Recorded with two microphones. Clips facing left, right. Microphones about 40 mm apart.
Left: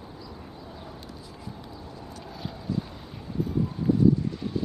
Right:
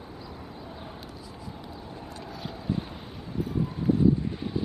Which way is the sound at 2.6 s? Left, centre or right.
Right.